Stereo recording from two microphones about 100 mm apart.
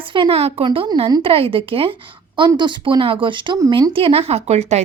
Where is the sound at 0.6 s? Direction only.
65° right (ahead or behind).